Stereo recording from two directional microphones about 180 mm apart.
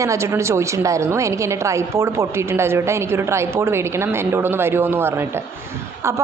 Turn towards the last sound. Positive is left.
turn(degrees=-15)  # may be behind; listen again after turning